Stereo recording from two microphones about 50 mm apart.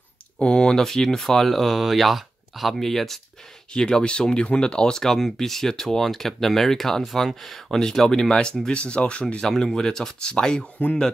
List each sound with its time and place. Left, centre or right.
0.4 s speech: centre
3.7 s speech: centre